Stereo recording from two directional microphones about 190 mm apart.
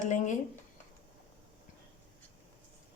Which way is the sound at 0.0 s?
40° left (ahead or behind).